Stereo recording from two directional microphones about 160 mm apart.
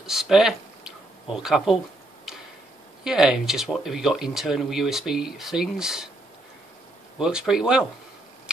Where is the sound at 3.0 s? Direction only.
5° right (ahead or behind).